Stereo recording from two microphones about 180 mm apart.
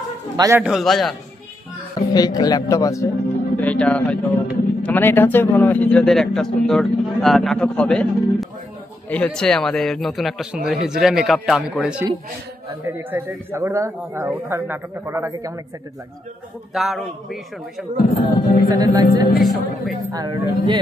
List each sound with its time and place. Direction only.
0.4 s speech: 15° right (ahead or behind)
0.7 s a man's voice: centre (ahead or behind)
2.0 s a man's voice: 20° left (ahead or behind); by 15.5 s 15° right (ahead or behind)
16.7 s a man's voice: centre (ahead or behind)
18.2 s speech: 45° left (ahead or behind)
18.7 s a woman's voice: 20° right (ahead or behind)
19.0 s a woman's voice: 55° left (ahead or behind)
19.4 s a man's voice: centre (ahead or behind)
20.1 s a woman's voice: 20° right (ahead or behind)